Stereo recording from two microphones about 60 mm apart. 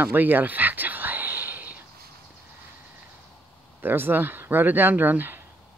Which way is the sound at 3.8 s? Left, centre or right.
Right.